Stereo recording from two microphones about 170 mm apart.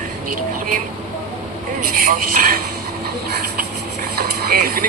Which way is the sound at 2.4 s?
55° right (ahead or behind).